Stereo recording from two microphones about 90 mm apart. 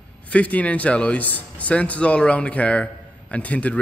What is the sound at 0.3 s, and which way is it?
A man's voice, 15° left (ahead or behind).